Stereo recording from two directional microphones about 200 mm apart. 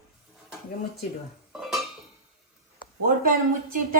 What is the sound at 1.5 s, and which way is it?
Dishes, centre (ahead or behind).